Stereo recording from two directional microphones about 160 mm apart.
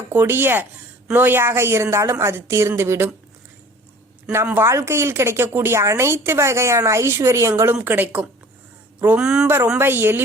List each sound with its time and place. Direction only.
0.1 s speech: 15° right (ahead or behind)
4.3 s speech: 15° right (ahead or behind)